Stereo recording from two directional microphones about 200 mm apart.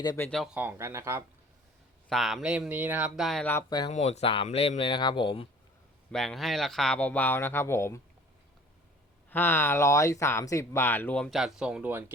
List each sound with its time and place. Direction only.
0.0 s speech: 20° left (ahead or behind)
0.3 s speech: centre (ahead or behind)
0.6 s speech: 10° right (ahead or behind)
2.0 s speech: centre (ahead or behind)
3.7 s speech: 20° left (ahead or behind)
3.9 s speech: 35° left (ahead or behind)
6.1 s speech: centre (ahead or behind)
9.3 s speech: 10° left (ahead or behind); by 12.1 s 10° right (ahead or behind)